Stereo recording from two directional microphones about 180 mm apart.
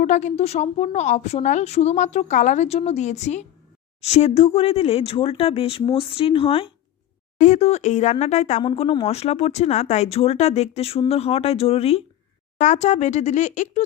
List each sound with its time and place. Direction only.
0.0 s a woman's voice: 40° left (ahead or behind)
7.3 s a woman's voice: 40° left (ahead or behind)